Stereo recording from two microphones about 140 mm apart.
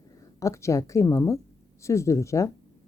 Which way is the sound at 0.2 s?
20° left (ahead or behind).